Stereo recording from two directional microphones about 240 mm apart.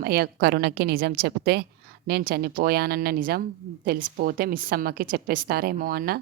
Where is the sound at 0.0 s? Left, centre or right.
Right.